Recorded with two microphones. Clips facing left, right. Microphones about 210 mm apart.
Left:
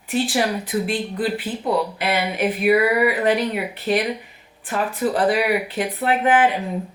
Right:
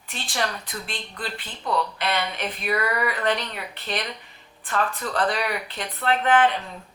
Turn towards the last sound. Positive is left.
turn(degrees=10)  # may be behind; listen again after turning